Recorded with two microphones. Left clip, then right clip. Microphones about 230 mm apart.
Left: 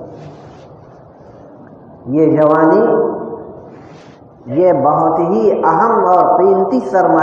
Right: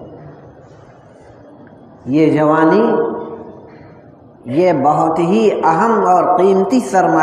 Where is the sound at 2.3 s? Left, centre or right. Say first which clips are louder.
Left 3 dB; right.